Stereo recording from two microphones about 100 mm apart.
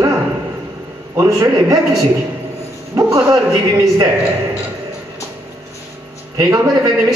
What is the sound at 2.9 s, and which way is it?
Speech, 35° right (ahead or behind).